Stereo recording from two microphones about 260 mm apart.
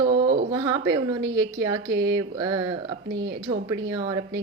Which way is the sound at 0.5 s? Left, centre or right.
Centre.